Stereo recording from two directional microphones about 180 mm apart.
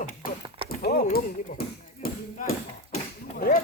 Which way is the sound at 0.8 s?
60° left (ahead or behind).